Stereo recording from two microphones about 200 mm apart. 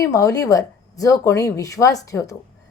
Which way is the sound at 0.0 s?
15° left (ahead or behind).